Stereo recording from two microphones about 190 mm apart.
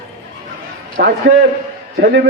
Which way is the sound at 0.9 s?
70° right (ahead or behind).